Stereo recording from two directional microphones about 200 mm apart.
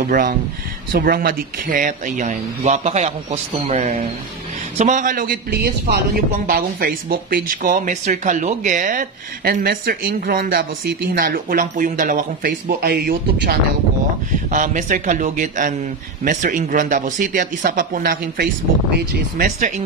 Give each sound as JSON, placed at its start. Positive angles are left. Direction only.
{"t": 0.9, "sound": "speech", "side_deg": -45}
{"t": 14.5, "sound": "speech", "side_deg": -40}